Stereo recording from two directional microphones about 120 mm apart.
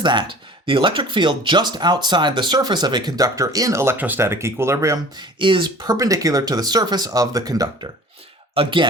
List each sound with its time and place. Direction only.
0.0 s speech: 40° right (ahead or behind); by 4.9 s 25° right (ahead or behind)
5.4 s speech: 45° right (ahead or behind)
8.5 s speech: 45° right (ahead or behind)